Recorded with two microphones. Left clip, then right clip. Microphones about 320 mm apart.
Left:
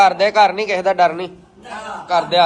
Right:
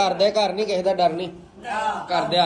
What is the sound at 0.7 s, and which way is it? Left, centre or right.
Speech, centre.